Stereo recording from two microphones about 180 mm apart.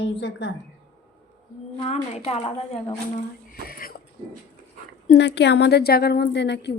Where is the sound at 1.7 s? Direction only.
35° left (ahead or behind).